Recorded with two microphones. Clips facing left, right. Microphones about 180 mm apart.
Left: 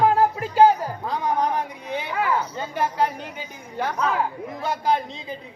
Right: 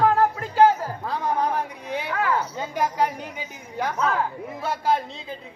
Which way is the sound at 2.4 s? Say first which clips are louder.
Even; 10° right (ahead or behind).